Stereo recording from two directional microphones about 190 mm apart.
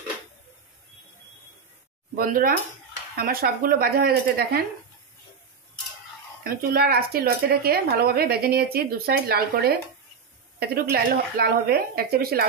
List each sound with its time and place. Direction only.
2.1 s a woman's voice: 50° right (ahead or behind)
6.4 s a woman's voice: 55° right (ahead or behind)